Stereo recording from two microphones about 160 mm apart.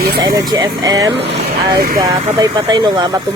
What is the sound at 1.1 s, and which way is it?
Speech, 90° right.